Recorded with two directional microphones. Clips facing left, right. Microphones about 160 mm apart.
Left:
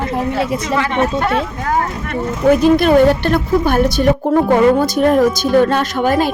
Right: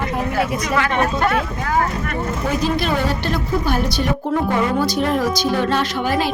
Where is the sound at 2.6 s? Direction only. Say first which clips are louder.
Left 10 dB; 55° left (ahead or behind).